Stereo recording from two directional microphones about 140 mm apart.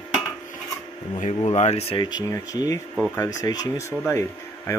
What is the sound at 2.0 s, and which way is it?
Speech, 25° left (ahead or behind).